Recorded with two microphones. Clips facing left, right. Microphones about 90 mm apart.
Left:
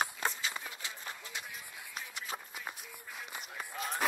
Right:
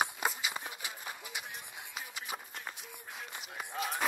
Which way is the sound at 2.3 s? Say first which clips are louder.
Left 1 dB; 5° left (ahead or behind).